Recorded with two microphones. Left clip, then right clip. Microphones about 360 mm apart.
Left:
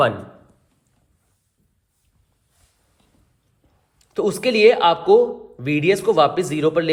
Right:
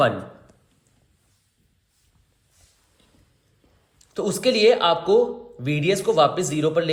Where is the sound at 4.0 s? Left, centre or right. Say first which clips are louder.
Left 4 dB; centre.